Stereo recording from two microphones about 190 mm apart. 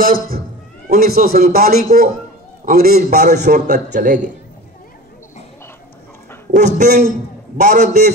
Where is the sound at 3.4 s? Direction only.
40° right (ahead or behind).